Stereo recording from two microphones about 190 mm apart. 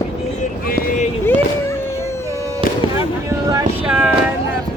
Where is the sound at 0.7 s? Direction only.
50° left (ahead or behind).